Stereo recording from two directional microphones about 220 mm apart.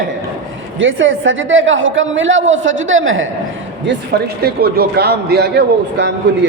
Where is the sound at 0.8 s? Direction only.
60° right (ahead or behind).